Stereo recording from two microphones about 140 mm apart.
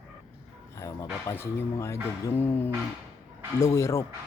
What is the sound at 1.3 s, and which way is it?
Speech, 15° left (ahead or behind).